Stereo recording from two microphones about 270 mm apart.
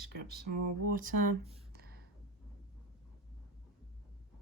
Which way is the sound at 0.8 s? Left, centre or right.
Right.